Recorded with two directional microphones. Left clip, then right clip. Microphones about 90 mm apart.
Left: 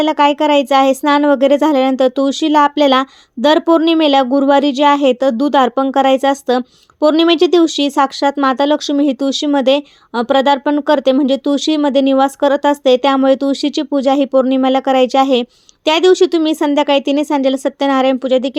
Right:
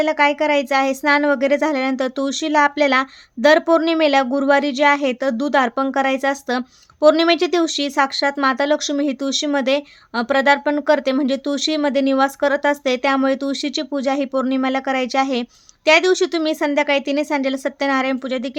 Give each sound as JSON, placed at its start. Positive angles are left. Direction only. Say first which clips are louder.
{"t": 0.0, "sound": "a woman's voice", "louder": "left 4 dB", "side_deg": 60}